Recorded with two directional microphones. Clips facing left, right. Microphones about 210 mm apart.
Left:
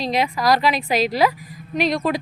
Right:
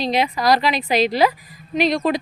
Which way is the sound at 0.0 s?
Centre (ahead or behind).